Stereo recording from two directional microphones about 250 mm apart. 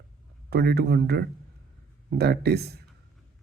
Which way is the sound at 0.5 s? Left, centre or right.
Right.